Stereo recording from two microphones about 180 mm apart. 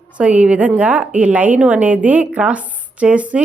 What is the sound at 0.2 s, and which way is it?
A woman's voice, 5° right (ahead or behind).